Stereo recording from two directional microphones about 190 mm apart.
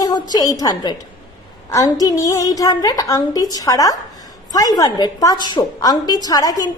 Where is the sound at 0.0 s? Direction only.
20° left (ahead or behind).